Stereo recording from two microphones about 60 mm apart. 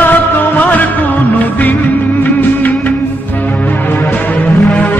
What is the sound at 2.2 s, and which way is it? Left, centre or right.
Music, left.